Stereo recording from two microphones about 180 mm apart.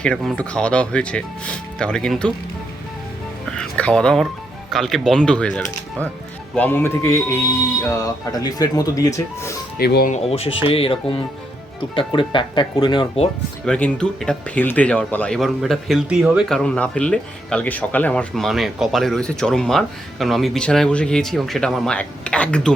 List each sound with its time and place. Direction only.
0.0 s speech: centre (ahead or behind)
3.6 s speech: 5° left (ahead or behind)
9.7 s speech: 60° left (ahead or behind)
10.1 s speech: 35° left (ahead or behind)
13.7 s speech: 5° left (ahead or behind)